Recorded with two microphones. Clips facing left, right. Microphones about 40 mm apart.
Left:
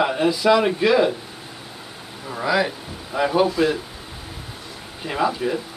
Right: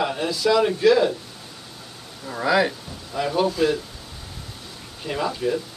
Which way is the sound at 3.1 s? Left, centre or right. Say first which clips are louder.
Left 3 dB; centre.